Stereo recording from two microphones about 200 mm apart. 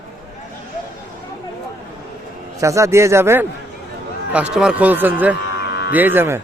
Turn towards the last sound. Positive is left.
turn(degrees=-10)  # may be behind; listen again after turning